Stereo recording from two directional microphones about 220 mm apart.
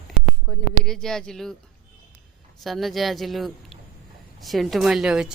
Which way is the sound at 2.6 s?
Centre (ahead or behind).